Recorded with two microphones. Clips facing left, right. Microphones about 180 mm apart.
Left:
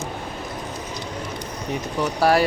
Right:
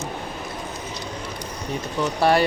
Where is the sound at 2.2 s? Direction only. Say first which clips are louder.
Even; centre (ahead or behind).